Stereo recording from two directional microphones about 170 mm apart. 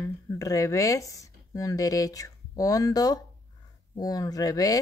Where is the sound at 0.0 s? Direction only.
20° left (ahead or behind).